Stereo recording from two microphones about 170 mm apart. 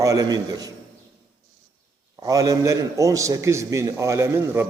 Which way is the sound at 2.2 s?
20° right (ahead or behind).